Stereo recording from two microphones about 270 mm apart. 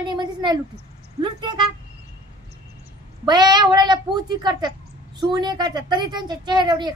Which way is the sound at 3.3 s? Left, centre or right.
Centre.